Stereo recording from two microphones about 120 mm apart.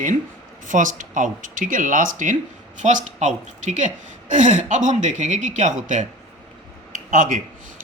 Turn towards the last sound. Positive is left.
turn(degrees=-90)